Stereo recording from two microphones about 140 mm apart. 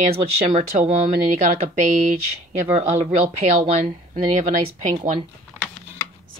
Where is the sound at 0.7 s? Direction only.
45° right (ahead or behind).